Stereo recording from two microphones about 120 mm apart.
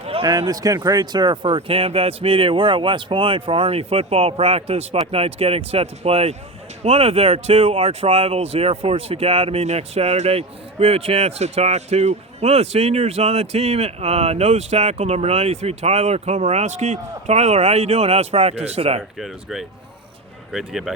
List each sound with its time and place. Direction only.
0.0 s a sound: 55° right (ahead or behind)
0.3 s speech: 35° right (ahead or behind); by 19.0 s 60° right (ahead or behind)
19.2 s speech: 5° right (ahead or behind)